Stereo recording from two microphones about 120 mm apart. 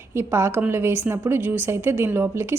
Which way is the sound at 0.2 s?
20° right (ahead or behind).